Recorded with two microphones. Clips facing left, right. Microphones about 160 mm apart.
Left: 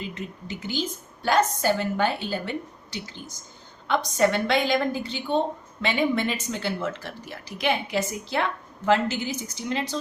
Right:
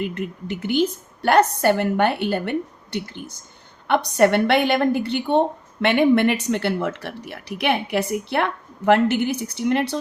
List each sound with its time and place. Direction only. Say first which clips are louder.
0.0 s a woman's voice: right 8 dB; 60° right (ahead or behind)